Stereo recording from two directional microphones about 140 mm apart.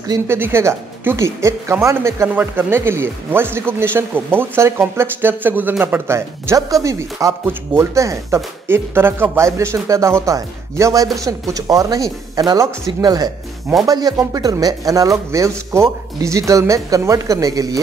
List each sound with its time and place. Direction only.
0.0 s speech: 25° right (ahead or behind)